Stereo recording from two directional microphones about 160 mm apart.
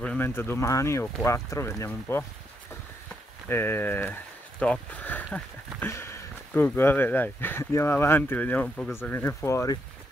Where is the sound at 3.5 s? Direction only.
15° left (ahead or behind).